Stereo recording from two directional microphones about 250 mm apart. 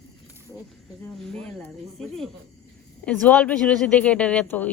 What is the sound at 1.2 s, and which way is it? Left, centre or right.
Speech, centre.